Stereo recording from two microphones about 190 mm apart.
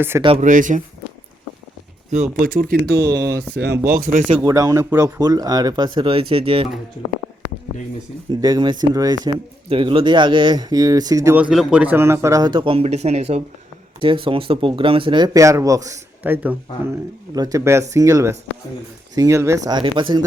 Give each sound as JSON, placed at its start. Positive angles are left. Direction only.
{"t": 0.3, "sound": "speech", "side_deg": -45}
{"t": 2.0, "sound": "speech", "side_deg": -40}
{"t": 2.8, "sound": "speech", "side_deg": -60}
{"t": 3.9, "sound": "speech", "side_deg": -50}
{"t": 4.4, "sound": "speech", "side_deg": -20}
{"t": 8.3, "sound": "speech", "side_deg": -20}